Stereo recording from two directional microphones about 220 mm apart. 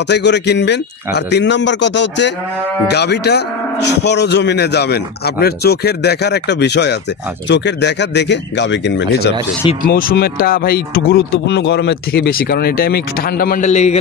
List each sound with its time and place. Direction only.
0.1 s cattle: 50° left (ahead or behind)
9.8 s cattle: 40° left (ahead or behind)